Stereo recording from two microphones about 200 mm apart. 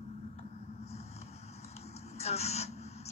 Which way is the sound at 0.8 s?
30° left (ahead or behind).